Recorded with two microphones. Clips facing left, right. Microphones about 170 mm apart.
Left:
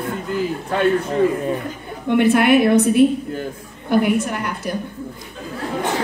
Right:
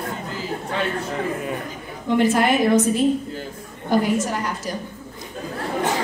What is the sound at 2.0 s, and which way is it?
A woman's voice, 60° left (ahead or behind).